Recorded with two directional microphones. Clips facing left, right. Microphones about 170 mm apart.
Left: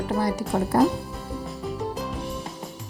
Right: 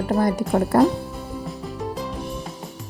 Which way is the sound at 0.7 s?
65° right (ahead or behind).